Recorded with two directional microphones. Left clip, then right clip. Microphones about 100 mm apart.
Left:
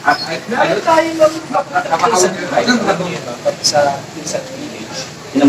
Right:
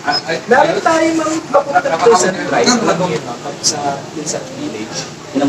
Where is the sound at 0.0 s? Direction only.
30° left (ahead or behind).